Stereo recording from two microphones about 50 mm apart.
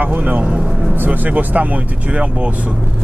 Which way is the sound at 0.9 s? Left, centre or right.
Right.